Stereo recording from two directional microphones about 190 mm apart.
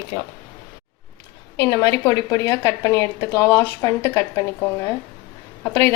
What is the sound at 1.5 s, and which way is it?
A woman's voice, 15° left (ahead or behind).